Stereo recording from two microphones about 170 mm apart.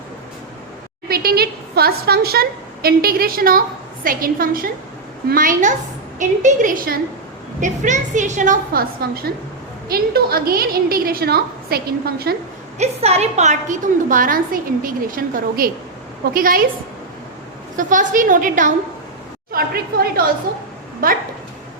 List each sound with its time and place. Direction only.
1.0 s a woman's voice: 65° right (ahead or behind)
7.6 s a woman's voice: 45° right (ahead or behind); by 12.4 s 65° right (ahead or behind)
12.8 s a woman's voice: 40° right (ahead or behind); by 16.6 s 55° right (ahead or behind)
17.7 s a woman's voice: 50° right (ahead or behind)
19.5 s a woman's voice: 65° right (ahead or behind)